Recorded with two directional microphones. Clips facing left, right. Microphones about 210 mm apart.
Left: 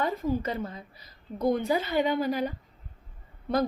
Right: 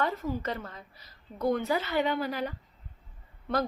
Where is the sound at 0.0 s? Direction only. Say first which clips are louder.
Left 3 dB; 15° left (ahead or behind).